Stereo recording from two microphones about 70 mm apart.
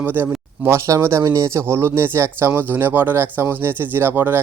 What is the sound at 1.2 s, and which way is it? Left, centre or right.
Speech, right.